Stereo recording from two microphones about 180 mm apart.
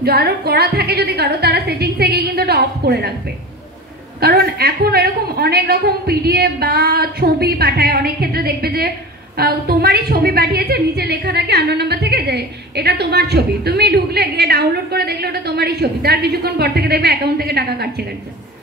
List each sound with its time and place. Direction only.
0.0 s a woman's voice: 60° right (ahead or behind)
4.2 s a woman's voice: 55° right (ahead or behind)